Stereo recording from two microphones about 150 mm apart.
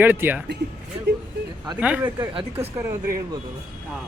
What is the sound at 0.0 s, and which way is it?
Speech, 10° right (ahead or behind).